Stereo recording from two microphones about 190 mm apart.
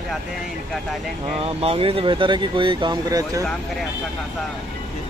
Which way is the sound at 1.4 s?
30° right (ahead or behind).